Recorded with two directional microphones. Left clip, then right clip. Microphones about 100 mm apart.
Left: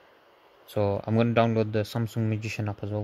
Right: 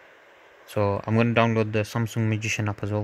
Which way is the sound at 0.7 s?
15° right (ahead or behind).